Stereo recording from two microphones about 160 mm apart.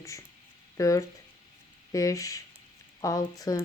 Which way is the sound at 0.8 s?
20° left (ahead or behind).